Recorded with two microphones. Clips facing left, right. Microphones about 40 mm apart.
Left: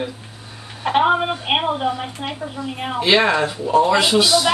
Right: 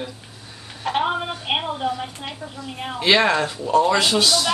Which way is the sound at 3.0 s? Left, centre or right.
Centre.